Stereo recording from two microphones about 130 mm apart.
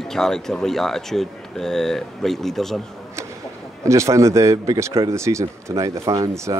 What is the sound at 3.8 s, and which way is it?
Speech, 25° right (ahead or behind).